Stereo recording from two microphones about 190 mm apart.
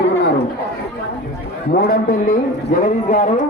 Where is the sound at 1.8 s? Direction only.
55° left (ahead or behind).